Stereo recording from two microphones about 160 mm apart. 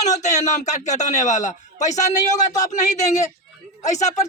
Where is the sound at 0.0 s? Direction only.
50° left (ahead or behind).